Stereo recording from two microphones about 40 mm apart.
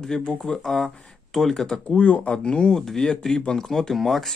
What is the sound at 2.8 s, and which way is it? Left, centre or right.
Speech, centre.